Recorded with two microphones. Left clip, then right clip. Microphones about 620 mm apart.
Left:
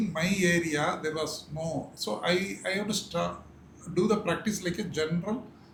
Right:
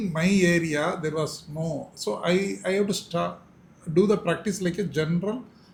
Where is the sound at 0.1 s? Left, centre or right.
Right.